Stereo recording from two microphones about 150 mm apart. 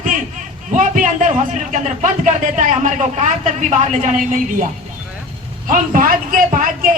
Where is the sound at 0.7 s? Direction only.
55° right (ahead or behind).